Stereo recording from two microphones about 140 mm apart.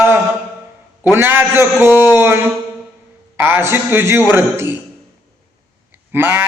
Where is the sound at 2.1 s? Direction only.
15° right (ahead or behind).